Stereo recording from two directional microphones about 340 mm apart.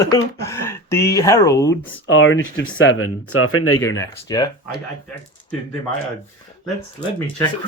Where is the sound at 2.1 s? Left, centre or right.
Left.